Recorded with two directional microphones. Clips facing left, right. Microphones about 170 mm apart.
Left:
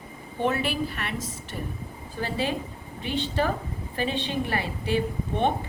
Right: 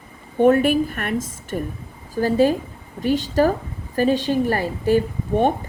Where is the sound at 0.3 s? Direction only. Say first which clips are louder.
Right 11 dB; 50° right (ahead or behind).